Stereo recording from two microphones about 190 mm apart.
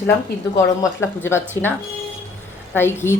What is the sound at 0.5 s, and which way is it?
A woman's voice, 15° left (ahead or behind).